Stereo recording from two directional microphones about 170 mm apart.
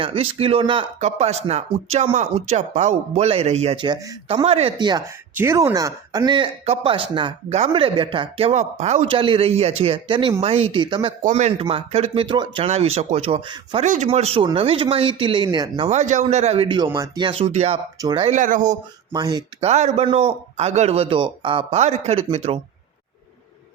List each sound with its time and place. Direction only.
0.0 s speech: 35° right (ahead or behind)
3.8 s speech: 20° right (ahead or behind)
4.3 s speech: 35° right (ahead or behind)
11.2 s a man's voice: 45° right (ahead or behind); by 12.6 s 25° right (ahead or behind)
12.6 s speech: 40° right (ahead or behind)
13.8 s speech: 45° right (ahead or behind); by 15.9 s 25° right (ahead or behind)
15.9 s speech: 45° right (ahead or behind)
18.3 s a man's voice: 50° right (ahead or behind)
19.1 s speech: 25° right (ahead or behind)
19.5 s speech: 40° right (ahead or behind)